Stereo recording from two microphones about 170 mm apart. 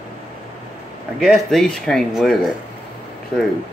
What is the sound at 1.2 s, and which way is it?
Speech, centre (ahead or behind).